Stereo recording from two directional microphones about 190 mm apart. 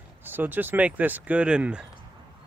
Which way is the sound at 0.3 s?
10° right (ahead or behind).